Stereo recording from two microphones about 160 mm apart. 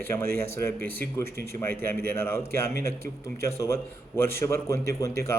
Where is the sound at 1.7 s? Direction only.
70° right (ahead or behind).